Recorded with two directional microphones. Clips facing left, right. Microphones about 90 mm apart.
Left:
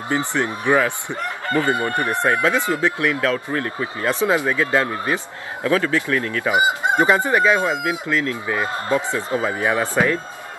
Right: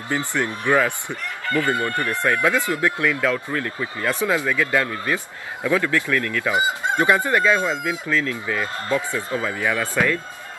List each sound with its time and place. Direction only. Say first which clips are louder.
0.1 s speech: left 2 dB; 20° left (ahead or behind)
1.5 s chicken: left 1 dB; 25° left (ahead or behind)